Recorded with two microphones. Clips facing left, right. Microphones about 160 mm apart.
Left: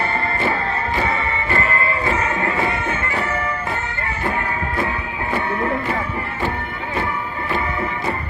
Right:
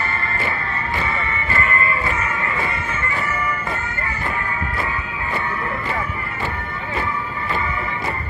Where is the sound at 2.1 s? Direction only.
75° left (ahead or behind).